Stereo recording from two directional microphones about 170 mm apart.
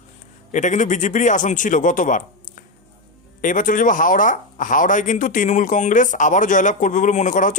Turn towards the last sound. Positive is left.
turn(degrees=50)  # may be behind; listen again after turning